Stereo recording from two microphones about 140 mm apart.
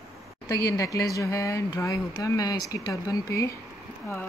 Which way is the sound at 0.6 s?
25° left (ahead or behind).